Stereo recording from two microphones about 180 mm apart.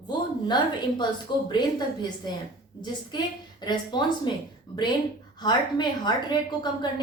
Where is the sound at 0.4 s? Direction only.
25° left (ahead or behind).